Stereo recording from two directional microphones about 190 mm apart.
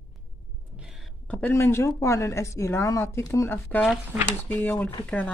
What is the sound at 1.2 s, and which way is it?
A woman's voice, 10° left (ahead or behind).